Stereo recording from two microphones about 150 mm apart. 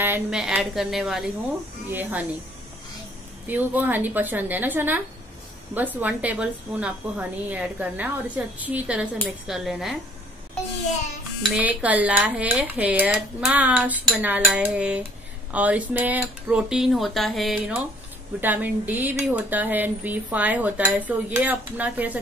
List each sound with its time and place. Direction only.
0.0 s speech: 15° right (ahead or behind)
0.4 s a woman's voice: 5° right (ahead or behind)
3.4 s speech: 10° right (ahead or behind)
11.4 s speech: 10° right (ahead or behind)